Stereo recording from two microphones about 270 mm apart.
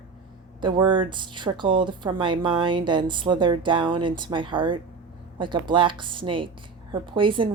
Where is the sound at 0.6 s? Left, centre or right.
Centre.